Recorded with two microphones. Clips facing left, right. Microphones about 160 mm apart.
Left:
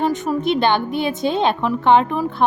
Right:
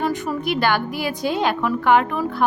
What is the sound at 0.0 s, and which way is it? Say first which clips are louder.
A woman's voice: left 4 dB; 20° left (ahead or behind).